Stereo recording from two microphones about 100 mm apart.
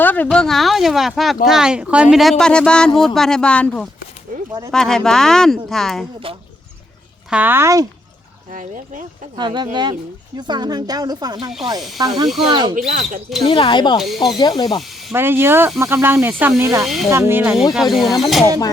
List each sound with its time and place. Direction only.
0.0 s speech: 15° left (ahead or behind)
0.3 s speech: 5° left (ahead or behind)
2.4 s speech: 10° left (ahead or behind)
7.3 s speech: 15° right (ahead or behind)
9.3 s speech: 50° right (ahead or behind)
12.8 s speech: 90° right
13.5 s speech: 55° left (ahead or behind)
14.0 s speech: centre (ahead or behind)
14.3 s speech: 40° left (ahead or behind)
15.1 s speech: 20° right (ahead or behind)
16.8 s speech: centre (ahead or behind)
17.1 s speech: 25° right (ahead or behind)
17.7 s speech: centre (ahead or behind)